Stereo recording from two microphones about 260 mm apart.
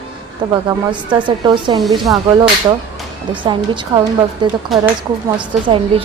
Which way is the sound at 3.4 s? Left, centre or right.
Centre.